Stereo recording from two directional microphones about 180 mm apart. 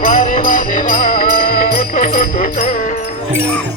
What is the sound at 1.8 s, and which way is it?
Music, 40° left (ahead or behind).